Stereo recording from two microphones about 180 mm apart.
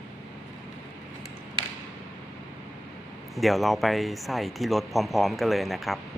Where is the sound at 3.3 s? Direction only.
Centre (ahead or behind).